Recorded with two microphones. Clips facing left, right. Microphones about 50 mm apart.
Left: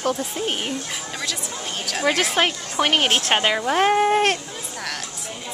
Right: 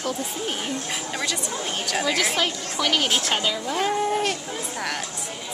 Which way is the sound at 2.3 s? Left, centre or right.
Left.